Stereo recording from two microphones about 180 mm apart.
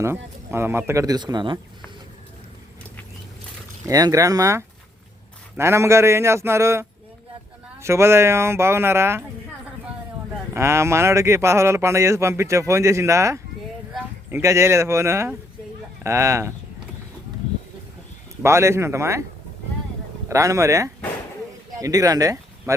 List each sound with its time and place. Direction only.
0.0 s speech: 15° right (ahead or behind)
3.8 s speech: 20° right (ahead or behind)
10.5 s speech: 15° right (ahead or behind)
18.4 s speech: 15° right (ahead or behind)
20.2 s speech: 15° right (ahead or behind)